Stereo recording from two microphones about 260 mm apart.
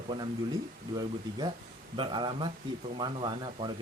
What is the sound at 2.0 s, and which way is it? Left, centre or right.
Speech, centre.